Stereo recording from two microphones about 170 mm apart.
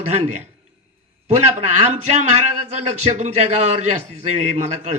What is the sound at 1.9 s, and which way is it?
A man's voice, 40° right (ahead or behind).